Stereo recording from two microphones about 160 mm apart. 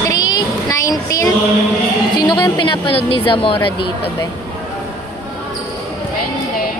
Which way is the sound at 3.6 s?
30° left (ahead or behind).